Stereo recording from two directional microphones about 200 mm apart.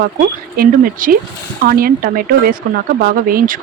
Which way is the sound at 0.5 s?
45° right (ahead or behind).